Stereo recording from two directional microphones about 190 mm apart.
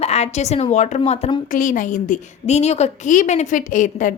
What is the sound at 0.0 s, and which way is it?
A woman's voice, 35° left (ahead or behind).